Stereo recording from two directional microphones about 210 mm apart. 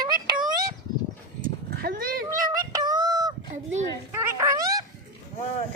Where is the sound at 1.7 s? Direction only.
45° right (ahead or behind).